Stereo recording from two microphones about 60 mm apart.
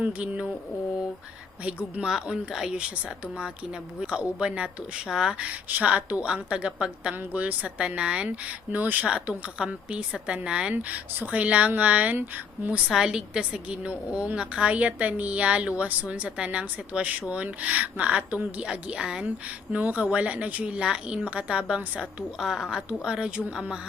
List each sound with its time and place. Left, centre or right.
0.0 s a woman's voice: right
2.0 s speech: centre
4.0 s speech: centre
5.5 s a woman's voice: right
8.7 s a woman's voice: right; by 19.2 s centre
19.7 s a woman's voice: right
22.4 s speech: centre